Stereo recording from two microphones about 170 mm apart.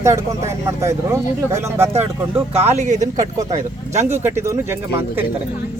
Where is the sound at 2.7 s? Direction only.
45° right (ahead or behind).